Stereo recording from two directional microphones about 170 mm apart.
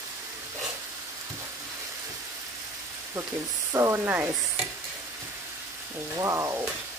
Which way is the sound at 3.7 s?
15° right (ahead or behind).